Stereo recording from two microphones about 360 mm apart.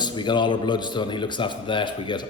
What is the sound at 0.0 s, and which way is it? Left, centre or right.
A man's voice, centre.